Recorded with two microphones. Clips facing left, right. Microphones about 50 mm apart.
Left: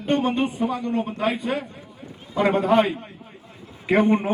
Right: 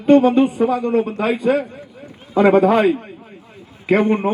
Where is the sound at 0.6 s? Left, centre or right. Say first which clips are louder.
Right 7 dB; right.